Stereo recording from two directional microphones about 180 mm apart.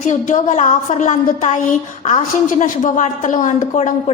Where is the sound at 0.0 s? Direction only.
45° left (ahead or behind).